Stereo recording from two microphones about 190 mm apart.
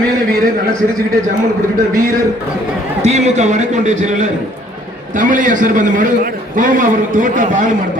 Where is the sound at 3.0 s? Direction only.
35° right (ahead or behind).